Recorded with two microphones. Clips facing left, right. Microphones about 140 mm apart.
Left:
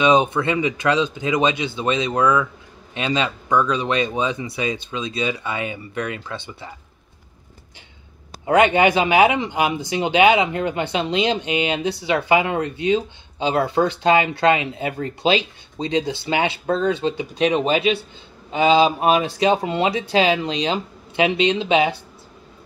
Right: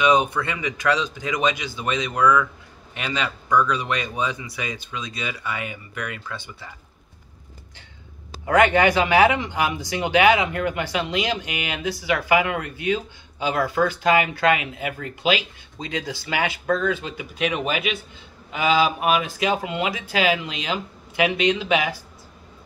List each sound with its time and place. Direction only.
0.0 s speech: 25° left (ahead or behind)
8.5 s speech: 20° left (ahead or behind)